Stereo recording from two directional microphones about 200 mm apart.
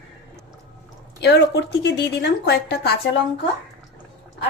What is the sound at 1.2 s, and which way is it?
A woman's voice, 55° left (ahead or behind).